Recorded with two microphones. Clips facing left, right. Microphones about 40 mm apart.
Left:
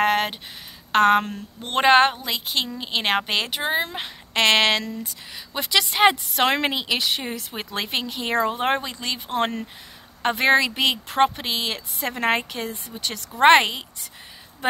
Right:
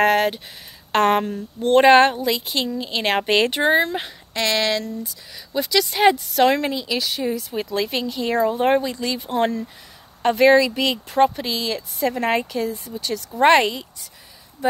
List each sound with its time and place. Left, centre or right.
0.0 s a sound: centre
0.9 s a woman's voice: centre
3.2 s speech: centre
4.3 s a woman's voice: left
6.5 s a woman's voice: left
7.0 s a woman's voice: left
13.4 s speech: left
14.6 s speech: left